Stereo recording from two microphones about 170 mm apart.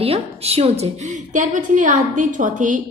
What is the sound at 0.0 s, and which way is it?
A woman's voice, 35° right (ahead or behind).